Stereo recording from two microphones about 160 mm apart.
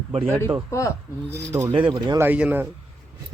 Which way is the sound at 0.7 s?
20° left (ahead or behind).